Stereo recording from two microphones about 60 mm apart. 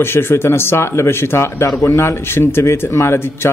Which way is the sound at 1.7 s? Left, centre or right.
Left.